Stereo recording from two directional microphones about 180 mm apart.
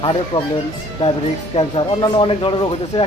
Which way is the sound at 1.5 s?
30° left (ahead or behind).